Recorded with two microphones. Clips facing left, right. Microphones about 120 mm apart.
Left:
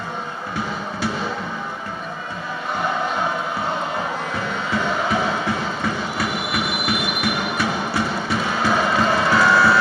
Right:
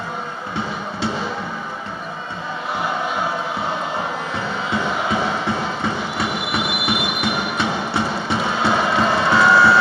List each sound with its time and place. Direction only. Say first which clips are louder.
4.7 s music: even; 25° right (ahead or behind)